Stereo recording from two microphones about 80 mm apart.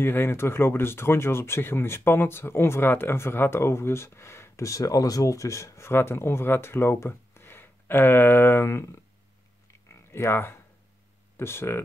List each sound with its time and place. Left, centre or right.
0.0 s speech: left
10.1 s speech: left